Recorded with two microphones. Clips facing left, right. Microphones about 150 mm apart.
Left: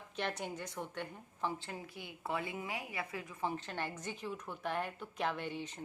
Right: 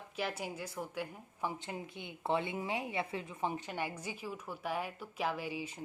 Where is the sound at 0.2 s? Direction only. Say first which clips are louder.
Right 1 dB; 5° right (ahead or behind).